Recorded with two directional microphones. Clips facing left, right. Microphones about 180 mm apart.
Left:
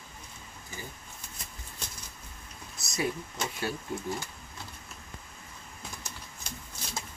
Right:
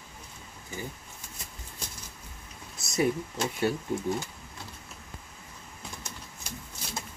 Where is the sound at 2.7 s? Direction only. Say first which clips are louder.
Right 6 dB; 25° right (ahead or behind).